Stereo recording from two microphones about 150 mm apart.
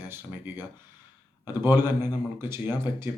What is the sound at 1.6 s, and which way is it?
Speech, 15° right (ahead or behind).